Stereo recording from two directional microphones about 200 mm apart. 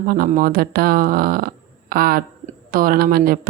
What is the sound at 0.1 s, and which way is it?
Speech, 45° right (ahead or behind).